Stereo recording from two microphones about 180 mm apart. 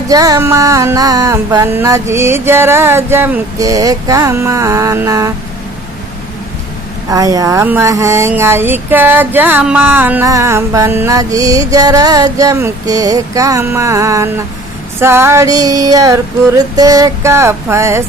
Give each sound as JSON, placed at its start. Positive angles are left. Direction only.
{"t": 0.1, "sound": "speech", "side_deg": -20}
{"t": 7.1, "sound": "speech", "side_deg": -20}